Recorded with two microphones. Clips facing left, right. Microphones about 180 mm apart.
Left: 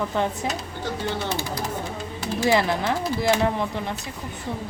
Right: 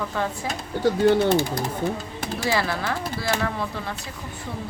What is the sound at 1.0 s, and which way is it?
Speech, 55° right (ahead or behind).